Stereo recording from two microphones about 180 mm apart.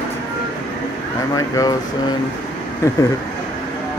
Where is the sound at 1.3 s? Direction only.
20° left (ahead or behind).